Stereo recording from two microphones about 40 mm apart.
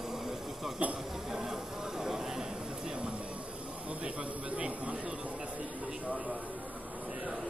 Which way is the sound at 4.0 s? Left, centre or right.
Right.